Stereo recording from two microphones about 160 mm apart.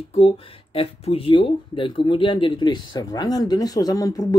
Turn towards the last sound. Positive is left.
turn(degrees=20)  # may be behind; listen again after turning